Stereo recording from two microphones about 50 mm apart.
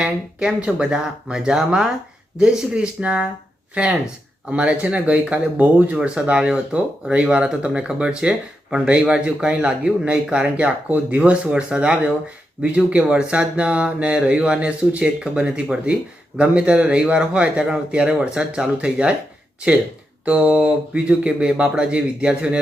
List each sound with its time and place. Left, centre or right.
0.0 s speech: centre
4.5 s speech: right
6.3 s speech: centre
20.2 s speech: right